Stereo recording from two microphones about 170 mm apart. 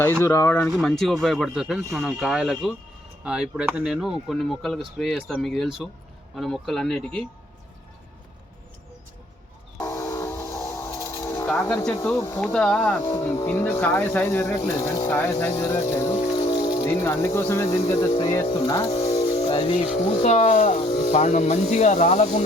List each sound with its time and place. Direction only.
0.3 s speech: 15° left (ahead or behind)
0.7 s speech: centre (ahead or behind)
9.7 s a sound: 15° left (ahead or behind)
11.4 s speech: 10° left (ahead or behind)
13.1 s speech: 20° left (ahead or behind); by 22.4 s 40° left (ahead or behind)